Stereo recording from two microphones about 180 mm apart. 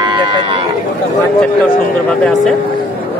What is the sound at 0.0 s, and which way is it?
Run, 25° right (ahead or behind).